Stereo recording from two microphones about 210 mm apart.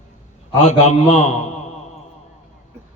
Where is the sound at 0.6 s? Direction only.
30° left (ahead or behind).